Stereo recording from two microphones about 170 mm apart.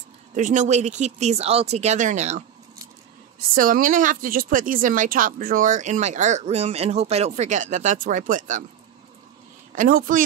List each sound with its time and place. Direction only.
0.4 s speech: 45° right (ahead or behind)
3.3 s speech: 55° right (ahead or behind)
9.8 s speech: 55° right (ahead or behind)